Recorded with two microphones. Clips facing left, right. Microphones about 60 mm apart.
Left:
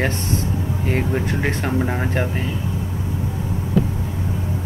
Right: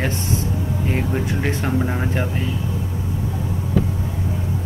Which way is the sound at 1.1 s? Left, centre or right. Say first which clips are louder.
Left 1 dB; centre.